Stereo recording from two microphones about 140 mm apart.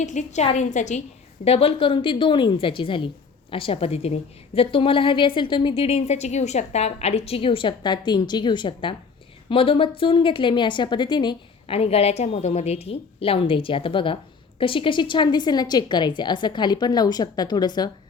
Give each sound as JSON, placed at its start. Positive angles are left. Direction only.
{"t": 0.0, "sound": "a woman's voice", "side_deg": 60}
{"t": 1.5, "sound": "a woman's voice", "side_deg": 40}